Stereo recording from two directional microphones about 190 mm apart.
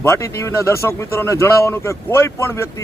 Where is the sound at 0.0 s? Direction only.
15° left (ahead or behind).